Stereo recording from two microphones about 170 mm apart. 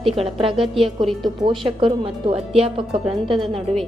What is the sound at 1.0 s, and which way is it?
Speech, 25° right (ahead or behind).